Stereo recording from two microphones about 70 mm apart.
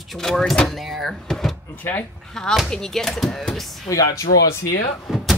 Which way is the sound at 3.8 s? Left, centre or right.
Left.